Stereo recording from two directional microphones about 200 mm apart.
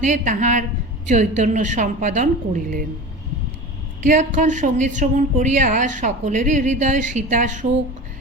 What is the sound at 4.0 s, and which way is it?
A woman's voice, 40° right (ahead or behind).